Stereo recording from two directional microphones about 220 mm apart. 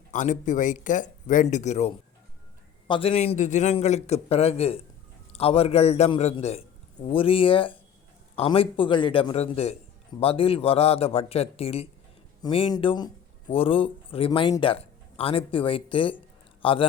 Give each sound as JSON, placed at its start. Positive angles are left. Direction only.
{"t": 0.1, "sound": "speech", "side_deg": 35}